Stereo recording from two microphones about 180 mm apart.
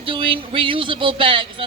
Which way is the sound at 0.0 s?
30° right (ahead or behind).